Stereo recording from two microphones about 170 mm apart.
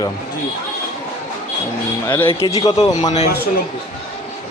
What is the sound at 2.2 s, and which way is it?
Speech, 30° left (ahead or behind).